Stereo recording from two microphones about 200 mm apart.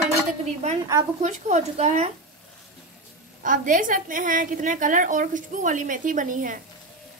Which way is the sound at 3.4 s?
40° right (ahead or behind).